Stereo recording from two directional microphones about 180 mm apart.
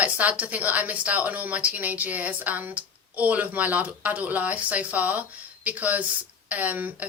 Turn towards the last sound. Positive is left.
turn(degrees=-10)  # may be behind; listen again after turning